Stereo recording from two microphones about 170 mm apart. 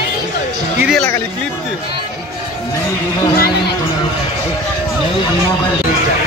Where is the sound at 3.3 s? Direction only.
65° left (ahead or behind).